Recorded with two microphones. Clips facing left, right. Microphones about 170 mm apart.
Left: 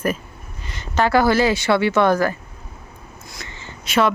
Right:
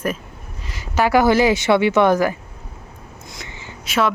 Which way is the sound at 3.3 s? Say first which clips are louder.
Even; 15° right (ahead or behind).